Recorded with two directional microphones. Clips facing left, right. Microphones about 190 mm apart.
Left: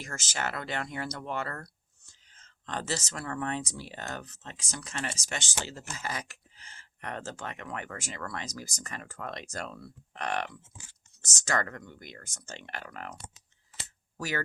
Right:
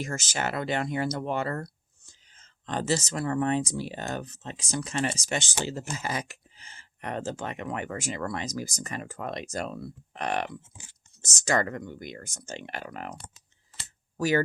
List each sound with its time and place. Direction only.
0.0 s speech: 15° right (ahead or behind)
14.2 s speech: 20° right (ahead or behind)